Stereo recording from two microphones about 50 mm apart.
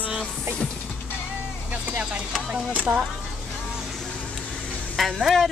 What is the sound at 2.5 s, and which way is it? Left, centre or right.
Speech, right.